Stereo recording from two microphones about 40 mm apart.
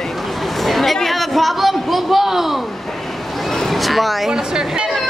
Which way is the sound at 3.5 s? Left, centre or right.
Centre.